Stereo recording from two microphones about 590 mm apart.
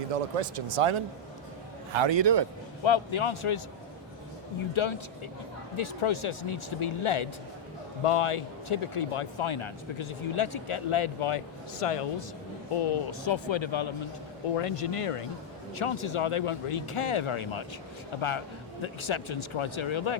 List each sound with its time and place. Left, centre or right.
0.1 s a man's voice: right
2.8 s speech: left
4.7 s speech: left
14.5 s speech: left